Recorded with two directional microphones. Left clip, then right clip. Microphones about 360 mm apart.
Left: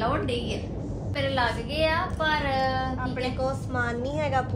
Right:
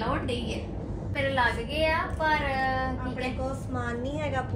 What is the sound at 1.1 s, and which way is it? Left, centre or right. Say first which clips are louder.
A woman's voice: even; centre.